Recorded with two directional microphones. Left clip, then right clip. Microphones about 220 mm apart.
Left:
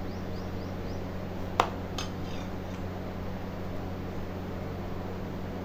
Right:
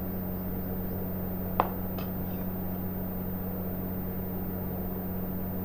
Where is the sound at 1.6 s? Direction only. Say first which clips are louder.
Left 1 dB; 30° left (ahead or behind).